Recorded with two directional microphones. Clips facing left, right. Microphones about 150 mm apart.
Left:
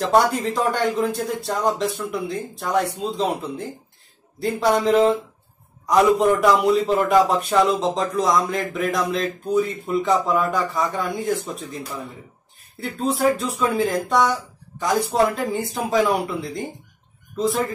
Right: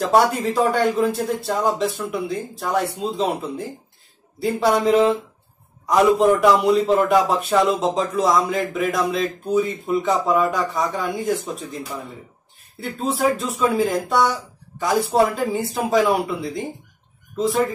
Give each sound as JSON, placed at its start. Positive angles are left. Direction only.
{"t": 0.0, "sound": "a man's voice", "side_deg": 0}
{"t": 12.8, "sound": "a man's voice", "side_deg": 0}